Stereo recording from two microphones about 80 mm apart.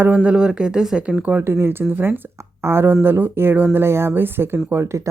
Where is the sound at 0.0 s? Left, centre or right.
Centre.